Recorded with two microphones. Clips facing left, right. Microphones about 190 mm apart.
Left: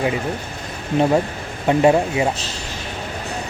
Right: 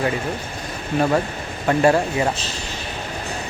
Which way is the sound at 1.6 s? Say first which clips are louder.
Left 2 dB; 20° left (ahead or behind).